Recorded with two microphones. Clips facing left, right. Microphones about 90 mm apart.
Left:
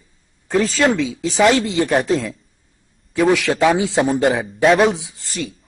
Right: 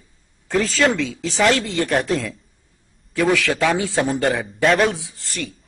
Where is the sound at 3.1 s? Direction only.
15° left (ahead or behind).